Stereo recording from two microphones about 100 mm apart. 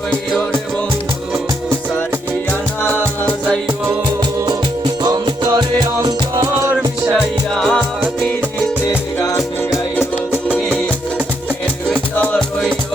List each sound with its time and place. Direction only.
4.4 s music: 45° right (ahead or behind)
7.5 s music: 5° left (ahead or behind)
9.2 s music: 30° left (ahead or behind)
10.3 s music: 15° right (ahead or behind)
12.1 s music: 10° left (ahead or behind)